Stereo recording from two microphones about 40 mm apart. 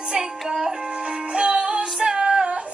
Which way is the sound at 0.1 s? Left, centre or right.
Centre.